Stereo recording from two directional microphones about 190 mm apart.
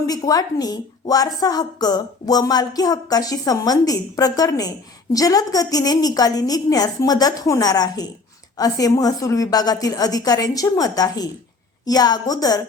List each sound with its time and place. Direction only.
0.1 s a woman's voice: 20° left (ahead or behind)